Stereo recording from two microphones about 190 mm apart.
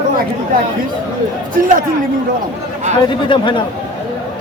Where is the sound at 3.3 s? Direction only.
25° left (ahead or behind).